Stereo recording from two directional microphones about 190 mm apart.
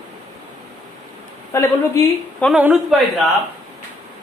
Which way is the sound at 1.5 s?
15° left (ahead or behind).